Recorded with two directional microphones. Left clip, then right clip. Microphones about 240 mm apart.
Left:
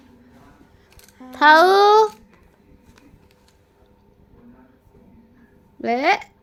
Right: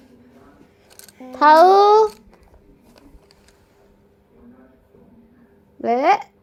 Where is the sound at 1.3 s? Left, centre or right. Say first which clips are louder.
Right 2 dB; centre.